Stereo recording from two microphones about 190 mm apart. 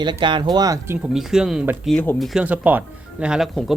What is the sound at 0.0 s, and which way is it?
Speech, 25° right (ahead or behind).